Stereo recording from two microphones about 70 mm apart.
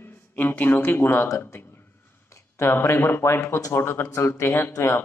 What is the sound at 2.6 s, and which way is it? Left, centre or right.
Speech, left.